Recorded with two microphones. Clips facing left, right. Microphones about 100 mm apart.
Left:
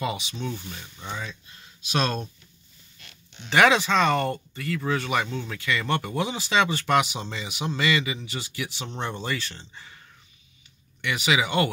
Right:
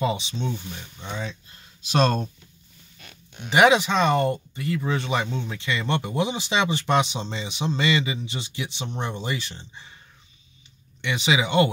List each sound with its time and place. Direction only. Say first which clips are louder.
0.0 s speech: right 4 dB; 30° right (ahead or behind)
1.9 s speech: right 5 dB; 35° right (ahead or behind)
3.4 s speech: right 2 dB; 20° right (ahead or behind)
11.0 s speech: right 1 dB; 25° right (ahead or behind)